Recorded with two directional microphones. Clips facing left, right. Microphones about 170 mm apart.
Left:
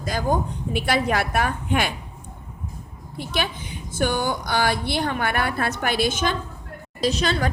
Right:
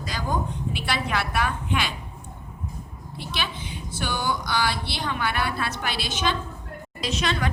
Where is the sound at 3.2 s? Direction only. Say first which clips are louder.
Left 5 dB; 50° left (ahead or behind).